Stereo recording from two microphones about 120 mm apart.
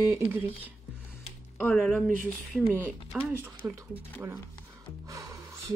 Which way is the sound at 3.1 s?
10° right (ahead or behind).